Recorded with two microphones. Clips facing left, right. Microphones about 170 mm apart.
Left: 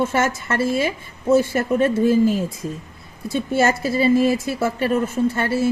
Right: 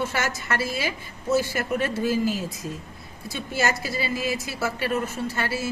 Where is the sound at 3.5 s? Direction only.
30° left (ahead or behind).